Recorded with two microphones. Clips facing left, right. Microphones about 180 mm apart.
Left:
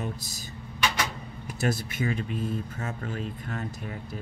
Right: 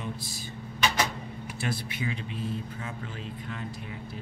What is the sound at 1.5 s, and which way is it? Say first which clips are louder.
Speech: left 5 dB; 45° left (ahead or behind).